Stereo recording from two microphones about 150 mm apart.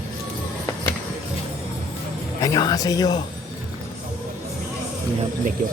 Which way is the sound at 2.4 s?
25° left (ahead or behind).